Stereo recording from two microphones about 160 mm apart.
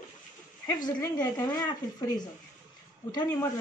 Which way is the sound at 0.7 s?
25° left (ahead or behind).